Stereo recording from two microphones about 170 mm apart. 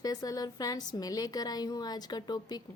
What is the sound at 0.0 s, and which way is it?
A woman's voice, 20° left (ahead or behind).